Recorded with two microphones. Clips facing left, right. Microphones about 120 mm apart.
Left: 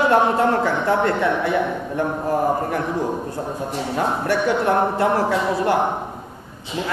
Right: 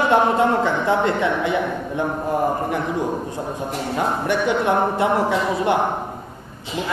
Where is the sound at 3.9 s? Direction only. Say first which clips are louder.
Even; 15° right (ahead or behind).